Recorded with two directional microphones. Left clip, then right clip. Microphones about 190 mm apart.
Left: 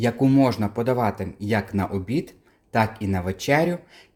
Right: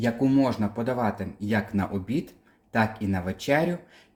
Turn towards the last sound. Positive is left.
turn(degrees=25)  # may be behind; listen again after turning